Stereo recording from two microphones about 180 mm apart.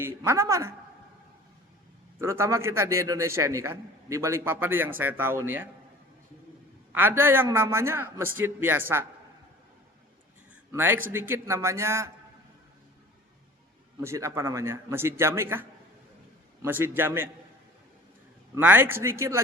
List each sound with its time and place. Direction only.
0.0 s a man's voice: 15° right (ahead or behind)
2.1 s a man's voice: 15° right (ahead or behind)
6.9 s a man's voice: 10° right (ahead or behind)
10.7 s a man's voice: 10° right (ahead or behind)
14.0 s a man's voice: 15° right (ahead or behind)
16.6 s a man's voice: 10° right (ahead or behind)
18.5 s a man's voice: 10° right (ahead or behind)